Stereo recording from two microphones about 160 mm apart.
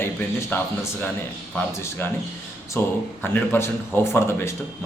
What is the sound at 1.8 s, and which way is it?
A man's voice, 15° left (ahead or behind).